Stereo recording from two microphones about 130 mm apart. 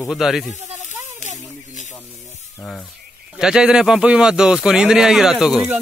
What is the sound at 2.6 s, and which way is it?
Speech, 5° left (ahead or behind).